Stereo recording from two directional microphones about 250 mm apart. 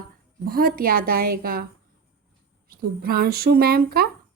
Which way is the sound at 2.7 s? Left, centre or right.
Right.